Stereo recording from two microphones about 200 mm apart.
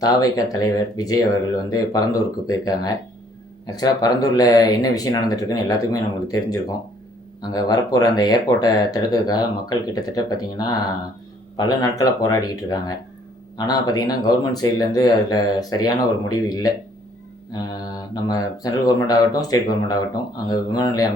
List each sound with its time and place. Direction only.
0.0 s speech: 20° left (ahead or behind)